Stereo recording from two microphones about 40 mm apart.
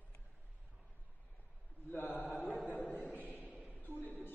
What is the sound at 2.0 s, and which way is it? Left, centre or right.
Mantra, left.